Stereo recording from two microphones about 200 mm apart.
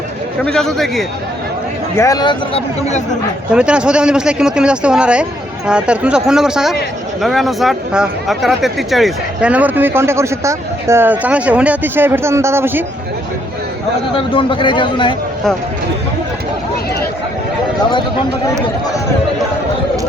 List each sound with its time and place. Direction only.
0.4 s speech: centre (ahead or behind)
2.0 s speech: 20° left (ahead or behind)
3.5 s speech: 5° right (ahead or behind)
14.3 s speech: 25° left (ahead or behind)